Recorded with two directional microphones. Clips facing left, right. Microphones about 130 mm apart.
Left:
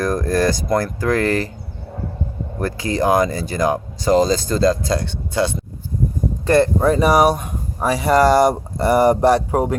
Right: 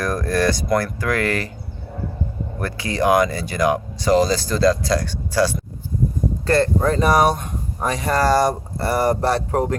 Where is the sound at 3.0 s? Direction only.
25° left (ahead or behind).